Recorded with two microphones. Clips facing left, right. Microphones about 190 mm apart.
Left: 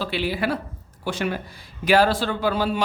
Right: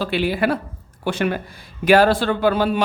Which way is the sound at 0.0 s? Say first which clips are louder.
Right 5 dB; 50° right (ahead or behind).